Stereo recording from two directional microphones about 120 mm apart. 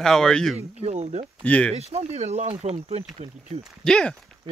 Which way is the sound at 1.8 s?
60° right (ahead or behind).